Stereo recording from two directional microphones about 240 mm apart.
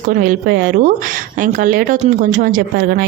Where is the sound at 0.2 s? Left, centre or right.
Right.